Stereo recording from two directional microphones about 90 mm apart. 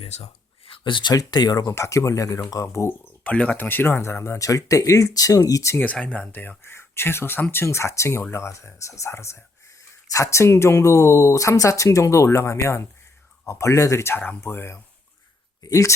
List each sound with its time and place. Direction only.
0.6 s a sound: 75° left (ahead or behind)
1.1 s speech: 45° left (ahead or behind)
1.7 s speech: 35° left (ahead or behind)
3.2 s speech: 15° left (ahead or behind); by 5.8 s 35° left (ahead or behind)
5.8 s speech: 15° left (ahead or behind)
15.6 s speech: 40° left (ahead or behind)